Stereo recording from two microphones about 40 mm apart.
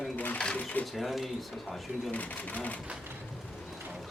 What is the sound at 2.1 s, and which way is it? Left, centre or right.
Speech, left.